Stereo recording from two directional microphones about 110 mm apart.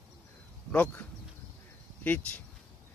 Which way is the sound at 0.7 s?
15° left (ahead or behind).